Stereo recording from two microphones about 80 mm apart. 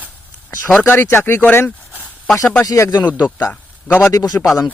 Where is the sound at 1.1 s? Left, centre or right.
Left.